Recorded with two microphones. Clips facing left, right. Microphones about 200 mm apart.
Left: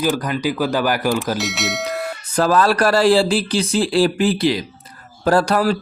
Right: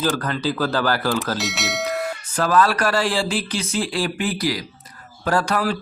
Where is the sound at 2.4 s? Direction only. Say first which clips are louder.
Left 3 dB; 35° left (ahead or behind).